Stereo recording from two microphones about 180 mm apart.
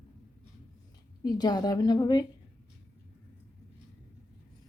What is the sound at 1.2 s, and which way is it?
A woman's voice, 20° left (ahead or behind).